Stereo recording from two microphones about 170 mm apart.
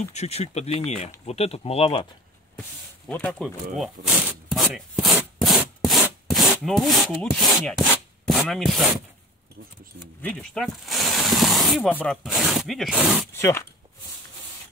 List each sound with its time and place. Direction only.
0.1 s speech: 40° left (ahead or behind)
3.1 s speech: 10° left (ahead or behind)
3.8 s rub: 5° right (ahead or behind)
6.2 s wood: centre (ahead or behind)
8.3 s rub: centre (ahead or behind)
10.2 s speech: 5° left (ahead or behind)
12.2 s speech: 5° right (ahead or behind)
13.3 s speech: 15° left (ahead or behind)